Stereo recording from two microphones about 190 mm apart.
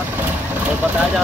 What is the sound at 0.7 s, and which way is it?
Speech, 10° right (ahead or behind).